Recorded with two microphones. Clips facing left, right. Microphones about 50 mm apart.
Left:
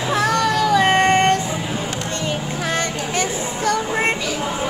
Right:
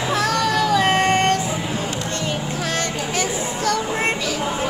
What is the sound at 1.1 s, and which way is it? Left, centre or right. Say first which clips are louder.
Vehicle: left 2 dB; centre.